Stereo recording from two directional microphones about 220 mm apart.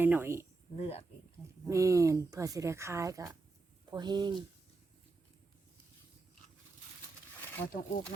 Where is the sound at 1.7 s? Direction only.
15° right (ahead or behind).